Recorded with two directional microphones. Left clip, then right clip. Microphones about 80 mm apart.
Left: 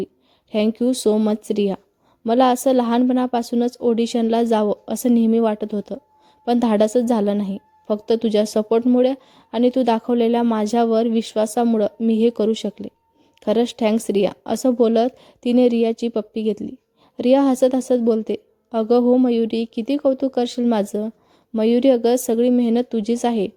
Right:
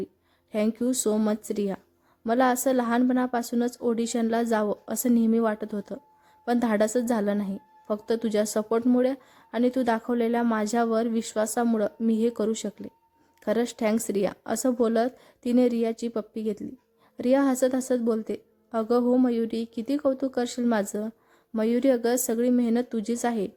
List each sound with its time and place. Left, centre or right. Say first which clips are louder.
0.5 s a woman's voice: left 7 dB; left
1.3 s a woman's voice: left 8 dB; left
6.4 s a woman's voice: left 7 dB; left
9.0 s a woman's voice: left 7 dB; left